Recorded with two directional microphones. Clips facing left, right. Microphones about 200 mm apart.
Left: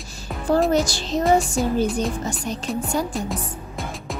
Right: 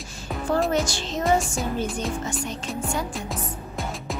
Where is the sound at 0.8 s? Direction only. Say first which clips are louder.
Left 4 dB; 35° left (ahead or behind).